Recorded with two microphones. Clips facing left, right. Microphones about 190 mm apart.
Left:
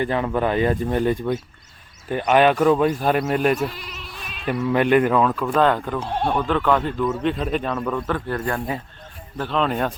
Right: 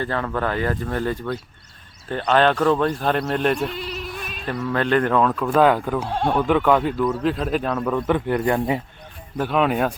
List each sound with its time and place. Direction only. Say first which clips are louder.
0.0 s speech: left 3 dB; 15° left (ahead or behind)
3.8 s bleat: right 8 dB; 30° right (ahead or behind)
4.4 s a man's voice: left 3 dB; 15° left (ahead or behind); by 9.9 s 5° right (ahead or behind)